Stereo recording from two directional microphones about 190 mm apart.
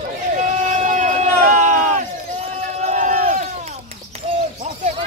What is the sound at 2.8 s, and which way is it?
Basketball bounce, 40° right (ahead or behind).